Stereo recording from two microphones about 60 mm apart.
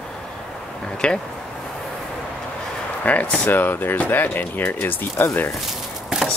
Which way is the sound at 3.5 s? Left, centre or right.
Left.